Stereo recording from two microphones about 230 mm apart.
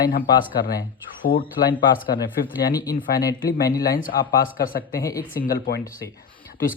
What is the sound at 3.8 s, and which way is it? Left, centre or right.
Speech, left.